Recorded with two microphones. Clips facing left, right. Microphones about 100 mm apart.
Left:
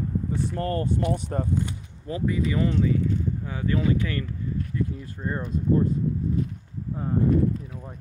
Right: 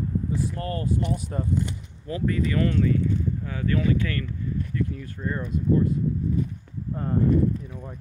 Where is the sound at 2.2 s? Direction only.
15° left (ahead or behind).